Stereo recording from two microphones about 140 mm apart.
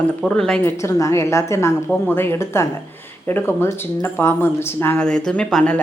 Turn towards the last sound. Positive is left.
turn(degrees=5)  # may be behind; listen again after turning